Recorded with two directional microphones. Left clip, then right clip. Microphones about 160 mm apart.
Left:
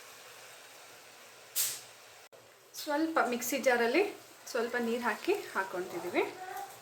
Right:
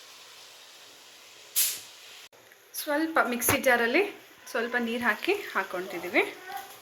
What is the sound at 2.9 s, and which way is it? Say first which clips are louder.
Speech: right 4 dB; 15° right (ahead or behind).